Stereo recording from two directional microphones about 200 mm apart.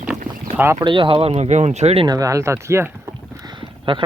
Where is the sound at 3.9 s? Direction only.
25° right (ahead or behind).